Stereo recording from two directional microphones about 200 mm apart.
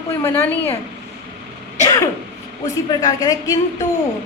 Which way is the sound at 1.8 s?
15° left (ahead or behind).